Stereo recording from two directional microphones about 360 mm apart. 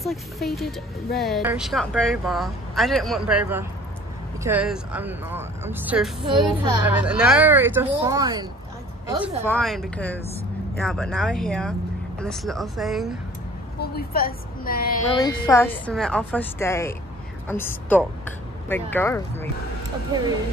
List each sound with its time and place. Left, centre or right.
0.0 s speech: centre
9.5 s speech: centre
13.7 s a woman's voice: left
15.1 s speech: centre